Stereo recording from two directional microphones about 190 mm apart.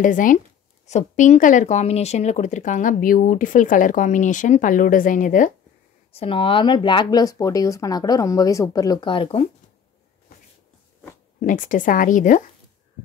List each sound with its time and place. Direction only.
0.0 s speech: 45° left (ahead or behind)
6.1 s speech: 30° left (ahead or behind)
11.4 s speech: 45° left (ahead or behind)